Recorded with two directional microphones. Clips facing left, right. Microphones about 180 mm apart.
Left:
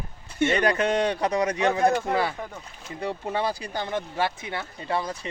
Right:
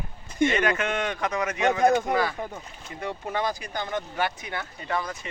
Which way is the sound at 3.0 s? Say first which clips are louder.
Left 2 dB; 30° left (ahead or behind).